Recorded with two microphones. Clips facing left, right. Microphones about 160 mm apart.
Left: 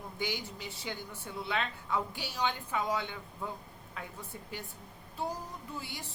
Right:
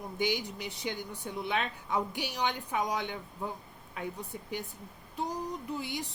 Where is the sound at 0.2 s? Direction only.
20° right (ahead or behind).